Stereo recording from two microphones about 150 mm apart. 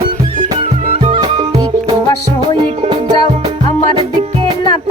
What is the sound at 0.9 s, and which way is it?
Music, 40° right (ahead or behind).